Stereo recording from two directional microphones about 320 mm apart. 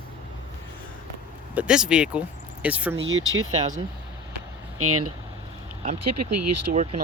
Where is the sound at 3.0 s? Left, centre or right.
Right.